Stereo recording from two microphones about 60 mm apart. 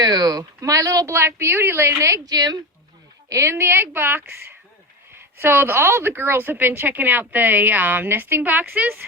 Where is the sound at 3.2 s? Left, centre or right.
Right.